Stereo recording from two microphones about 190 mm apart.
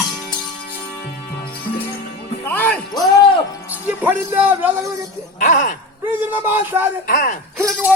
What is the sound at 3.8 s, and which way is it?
Speech, 10° right (ahead or behind).